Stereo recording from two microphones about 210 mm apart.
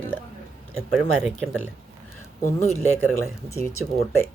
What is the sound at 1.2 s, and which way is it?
Speech, 5° left (ahead or behind).